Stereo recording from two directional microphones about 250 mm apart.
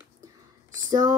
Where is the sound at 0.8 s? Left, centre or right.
Centre.